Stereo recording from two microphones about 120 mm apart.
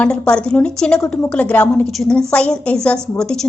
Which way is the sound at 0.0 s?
10° left (ahead or behind).